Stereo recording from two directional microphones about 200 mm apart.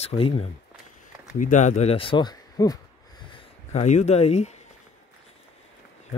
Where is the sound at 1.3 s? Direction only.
40° left (ahead or behind); by 2.8 s 20° left (ahead or behind).